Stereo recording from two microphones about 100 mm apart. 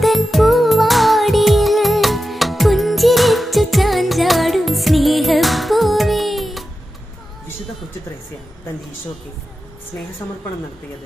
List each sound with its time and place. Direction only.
0.0 s music: centre (ahead or behind)
10.2 s a woman's voice: 30° left (ahead or behind)